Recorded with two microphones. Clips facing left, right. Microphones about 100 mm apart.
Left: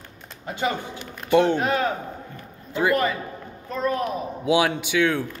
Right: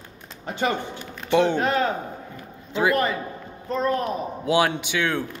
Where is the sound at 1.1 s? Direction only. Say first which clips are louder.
Left 1 dB; 5° left (ahead or behind).